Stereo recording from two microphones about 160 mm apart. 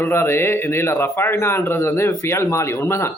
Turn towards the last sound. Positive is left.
turn(degrees=15)  # may be behind; listen again after turning